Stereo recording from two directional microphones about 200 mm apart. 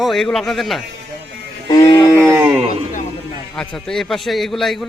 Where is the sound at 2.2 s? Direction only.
10° right (ahead or behind).